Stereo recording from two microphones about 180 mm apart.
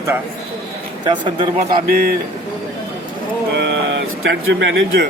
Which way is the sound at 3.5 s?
75° right (ahead or behind).